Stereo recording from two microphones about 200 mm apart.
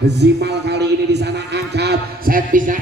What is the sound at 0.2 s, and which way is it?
A man's voice, 60° right (ahead or behind).